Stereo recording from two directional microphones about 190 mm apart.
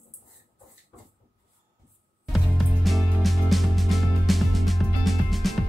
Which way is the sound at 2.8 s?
Centre (ahead or behind).